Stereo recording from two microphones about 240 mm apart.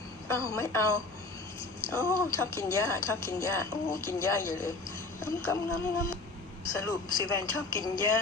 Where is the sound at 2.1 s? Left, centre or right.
Centre.